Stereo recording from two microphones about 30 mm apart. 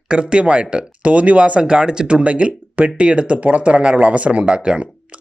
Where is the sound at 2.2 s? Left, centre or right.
Right.